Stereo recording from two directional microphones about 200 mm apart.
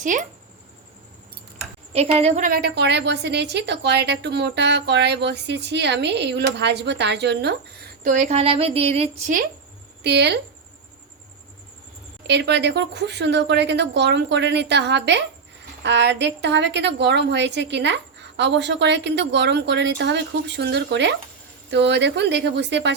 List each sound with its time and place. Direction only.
0.0 s a woman's voice: 40° right (ahead or behind)
1.9 s a woman's voice: 30° right (ahead or behind)
2.5 s a woman's voice: 55° right (ahead or behind)
8.0 s a woman's voice: 40° right (ahead or behind)
10.0 s a woman's voice: 55° right (ahead or behind)
12.3 s a woman's voice: 60° right (ahead or behind)